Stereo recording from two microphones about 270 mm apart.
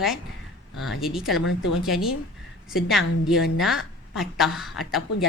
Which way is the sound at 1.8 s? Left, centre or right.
Centre.